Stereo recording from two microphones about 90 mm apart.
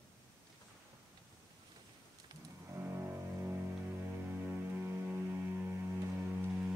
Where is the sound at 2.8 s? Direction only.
25° right (ahead or behind).